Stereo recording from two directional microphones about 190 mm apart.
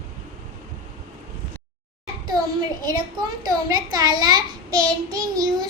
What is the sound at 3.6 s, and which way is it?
A child's voice, 20° right (ahead or behind).